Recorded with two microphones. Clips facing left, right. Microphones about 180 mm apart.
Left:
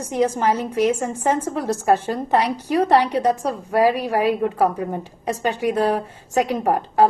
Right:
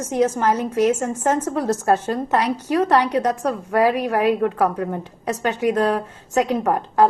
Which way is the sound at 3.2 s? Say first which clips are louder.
Left 1 dB; 10° left (ahead or behind).